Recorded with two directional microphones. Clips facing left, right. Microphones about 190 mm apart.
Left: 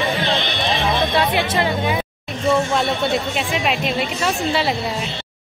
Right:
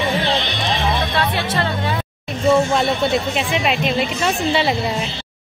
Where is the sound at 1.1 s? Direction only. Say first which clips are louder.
Left 2 dB; 15° left (ahead or behind).